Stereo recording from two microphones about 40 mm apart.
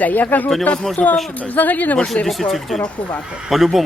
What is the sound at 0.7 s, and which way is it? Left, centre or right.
Speech, left.